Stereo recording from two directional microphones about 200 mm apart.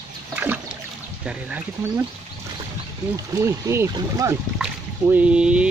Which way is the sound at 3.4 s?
15° right (ahead or behind).